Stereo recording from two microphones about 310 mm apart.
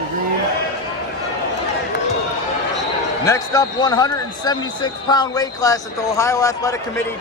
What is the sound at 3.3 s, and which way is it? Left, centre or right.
Speech, centre.